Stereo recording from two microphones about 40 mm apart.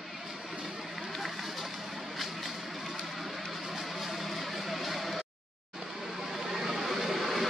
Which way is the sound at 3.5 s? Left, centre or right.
Centre.